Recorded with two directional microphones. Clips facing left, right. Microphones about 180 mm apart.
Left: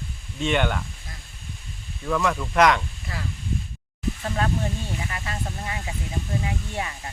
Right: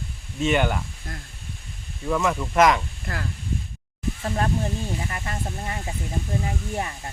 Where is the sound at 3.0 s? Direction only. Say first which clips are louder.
Right 2 dB; 60° right (ahead or behind).